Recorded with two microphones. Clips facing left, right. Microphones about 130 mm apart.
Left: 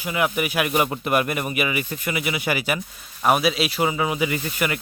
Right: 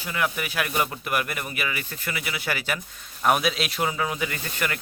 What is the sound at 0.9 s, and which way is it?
Speech, 25° left (ahead or behind).